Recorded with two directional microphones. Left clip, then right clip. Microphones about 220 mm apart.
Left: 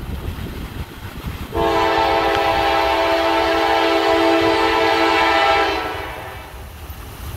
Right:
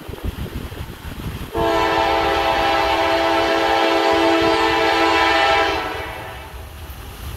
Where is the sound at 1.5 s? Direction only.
5° left (ahead or behind).